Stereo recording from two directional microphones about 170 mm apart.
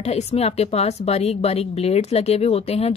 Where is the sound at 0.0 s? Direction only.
40° left (ahead or behind).